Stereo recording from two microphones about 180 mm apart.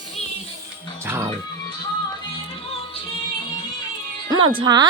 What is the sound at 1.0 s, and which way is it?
Music, 15° right (ahead or behind).